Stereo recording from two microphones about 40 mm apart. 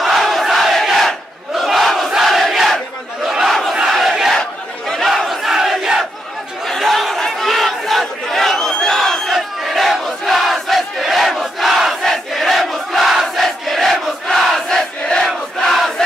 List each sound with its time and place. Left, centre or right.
0.0 s crowd: centre
3.3 s crowd: centre
3.9 s battle cry: centre
4.4 s a sound: centre
5.0 s battle cry: centre
5.5 s crowd: centre
6.6 s crowd: centre
7.2 s battle cry: centre
8.7 s crowd: centre
9.3 s crowd: centre
15.2 s a sound: centre